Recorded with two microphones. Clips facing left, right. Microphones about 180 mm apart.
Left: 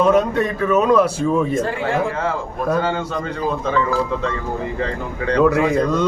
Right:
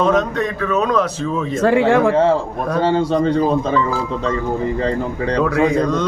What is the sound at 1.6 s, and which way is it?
Speech, 70° right (ahead or behind).